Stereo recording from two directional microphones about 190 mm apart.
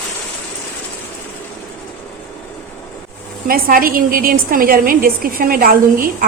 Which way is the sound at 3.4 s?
50° right (ahead or behind).